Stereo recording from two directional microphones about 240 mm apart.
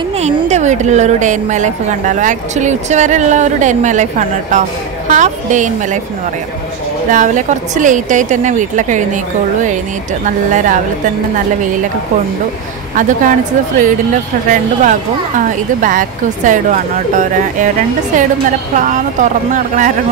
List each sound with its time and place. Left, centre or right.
0.2 s speech: right
7.1 s speech: right
10.2 s speech: right
12.9 s speech: right